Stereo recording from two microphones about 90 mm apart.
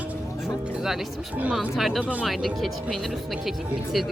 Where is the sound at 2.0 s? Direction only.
15° right (ahead or behind).